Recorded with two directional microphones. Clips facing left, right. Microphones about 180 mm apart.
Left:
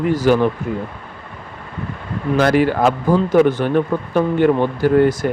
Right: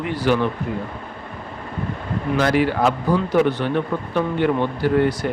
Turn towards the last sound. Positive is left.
turn(degrees=45)  # may be behind; listen again after turning